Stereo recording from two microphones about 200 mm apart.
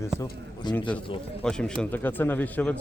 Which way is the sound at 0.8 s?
5° left (ahead or behind).